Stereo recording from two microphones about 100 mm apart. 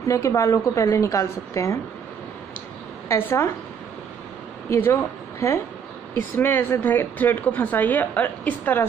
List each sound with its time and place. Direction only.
0.1 s a woman's voice: 30° left (ahead or behind)
3.1 s a woman's voice: 20° left (ahead or behind)
4.6 s a woman's voice: 20° left (ahead or behind)
6.1 s speech: 20° left (ahead or behind)